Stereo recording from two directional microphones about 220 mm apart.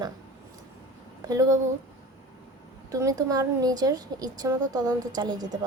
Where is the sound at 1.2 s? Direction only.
15° right (ahead or behind).